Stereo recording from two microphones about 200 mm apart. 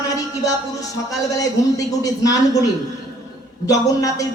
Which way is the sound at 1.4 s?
15° left (ahead or behind).